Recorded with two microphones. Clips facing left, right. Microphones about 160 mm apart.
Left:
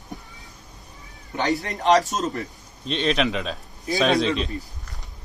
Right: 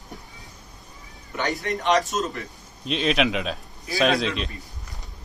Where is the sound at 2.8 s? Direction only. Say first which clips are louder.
Even; 5° right (ahead or behind).